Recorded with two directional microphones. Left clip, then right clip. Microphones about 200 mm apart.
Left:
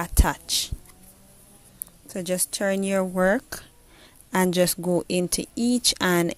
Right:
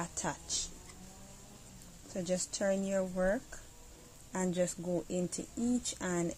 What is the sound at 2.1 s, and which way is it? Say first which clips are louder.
Speech: left 8 dB; 45° left (ahead or behind).